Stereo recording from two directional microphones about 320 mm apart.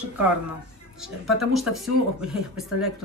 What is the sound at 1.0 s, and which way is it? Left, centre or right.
Speech, centre.